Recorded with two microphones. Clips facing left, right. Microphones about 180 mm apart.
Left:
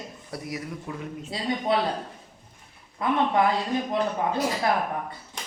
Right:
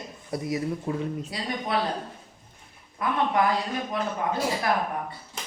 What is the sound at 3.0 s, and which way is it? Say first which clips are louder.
Speech: left 3 dB; 25° left (ahead or behind).